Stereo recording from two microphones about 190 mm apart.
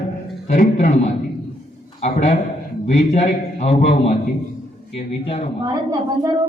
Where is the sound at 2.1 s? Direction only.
40° left (ahead or behind).